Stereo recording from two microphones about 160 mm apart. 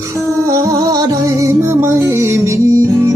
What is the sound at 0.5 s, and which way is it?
Music, 20° right (ahead or behind).